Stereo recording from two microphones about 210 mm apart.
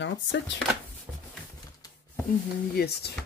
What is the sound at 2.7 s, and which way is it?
Speech, 50° left (ahead or behind).